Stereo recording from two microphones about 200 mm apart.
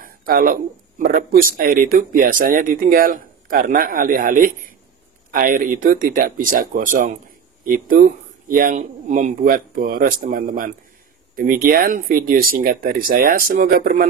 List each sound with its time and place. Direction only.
0.0 s speech: 45° right (ahead or behind)